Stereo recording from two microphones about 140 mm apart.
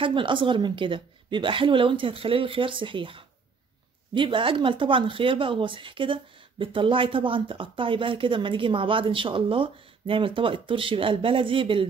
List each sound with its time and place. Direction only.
0.0 s speech: 35° right (ahead or behind)